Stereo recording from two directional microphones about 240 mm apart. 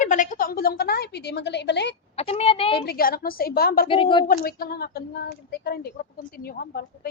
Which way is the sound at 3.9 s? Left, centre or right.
Left.